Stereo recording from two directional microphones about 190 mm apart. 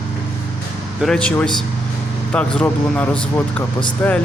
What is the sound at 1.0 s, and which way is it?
A man's voice, 5° left (ahead or behind).